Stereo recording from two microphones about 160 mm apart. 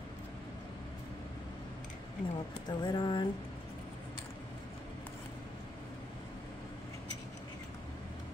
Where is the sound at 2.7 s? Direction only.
25° left (ahead or behind).